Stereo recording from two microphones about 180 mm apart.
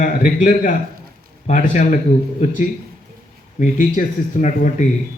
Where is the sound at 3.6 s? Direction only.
45° left (ahead or behind).